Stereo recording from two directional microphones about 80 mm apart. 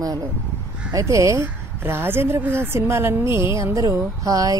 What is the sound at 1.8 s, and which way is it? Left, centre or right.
A woman's voice, right.